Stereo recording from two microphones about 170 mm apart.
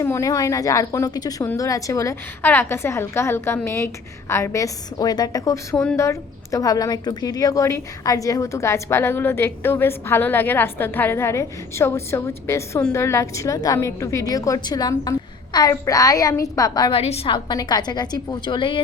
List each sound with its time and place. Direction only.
0.0 s a woman's voice: 15° left (ahead or behind)
5.7 s a woman's voice: 5° left (ahead or behind)
6.0 s a woman's voice: 20° left (ahead or behind)
17.0 s a woman's voice: 35° left (ahead or behind)